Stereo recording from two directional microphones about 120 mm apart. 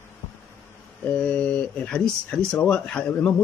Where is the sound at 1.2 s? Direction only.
10° left (ahead or behind).